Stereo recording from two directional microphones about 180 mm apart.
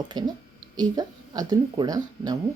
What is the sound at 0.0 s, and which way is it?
Speech, 25° right (ahead or behind).